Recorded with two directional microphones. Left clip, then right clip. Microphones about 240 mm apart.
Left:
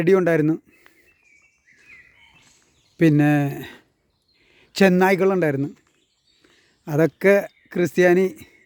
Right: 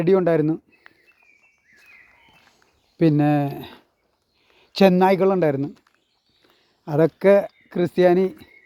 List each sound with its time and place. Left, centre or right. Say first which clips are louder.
0.0 s speech: left 1 dB; left
3.0 s speech: left 1 dB; left
6.8 s speech: right 1 dB; left